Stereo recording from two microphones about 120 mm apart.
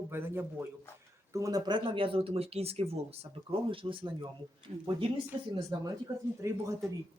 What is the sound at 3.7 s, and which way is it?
Speech, 45° right (ahead or behind).